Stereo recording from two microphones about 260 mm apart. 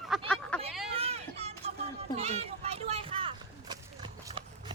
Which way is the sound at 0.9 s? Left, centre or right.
Right.